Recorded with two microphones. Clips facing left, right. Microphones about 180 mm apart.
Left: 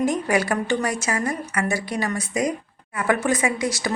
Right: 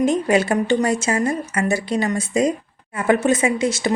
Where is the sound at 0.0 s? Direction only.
25° right (ahead or behind).